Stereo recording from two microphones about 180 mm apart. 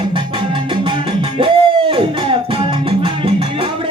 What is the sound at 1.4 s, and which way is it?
Music, 30° right (ahead or behind).